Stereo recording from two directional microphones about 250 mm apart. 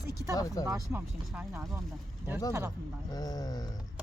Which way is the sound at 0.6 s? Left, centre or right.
Centre.